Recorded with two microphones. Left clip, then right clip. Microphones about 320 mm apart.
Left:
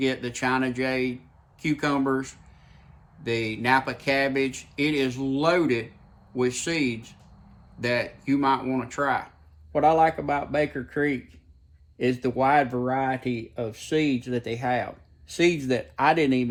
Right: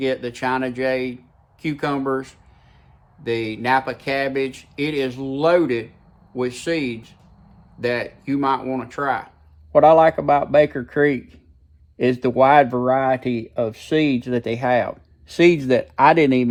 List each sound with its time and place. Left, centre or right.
0.0 s speech: centre
9.7 s speech: right